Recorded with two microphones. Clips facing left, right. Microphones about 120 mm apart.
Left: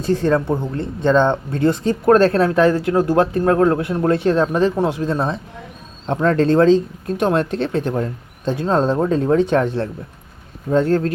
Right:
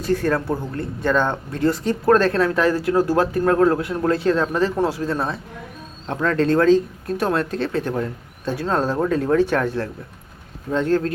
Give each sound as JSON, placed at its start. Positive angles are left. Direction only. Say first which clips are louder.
{"t": 0.0, "sound": "speech", "louder": "left 3 dB", "side_deg": 25}